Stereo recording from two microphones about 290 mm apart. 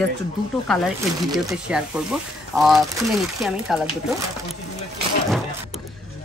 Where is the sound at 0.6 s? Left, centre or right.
Centre.